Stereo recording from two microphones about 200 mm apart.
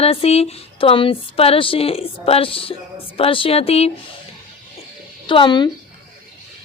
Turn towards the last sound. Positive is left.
turn(degrees=25)  # may be behind; listen again after turning